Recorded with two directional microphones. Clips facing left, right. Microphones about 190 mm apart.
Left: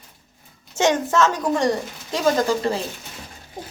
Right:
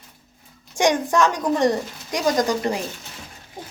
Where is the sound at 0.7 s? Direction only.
15° right (ahead or behind).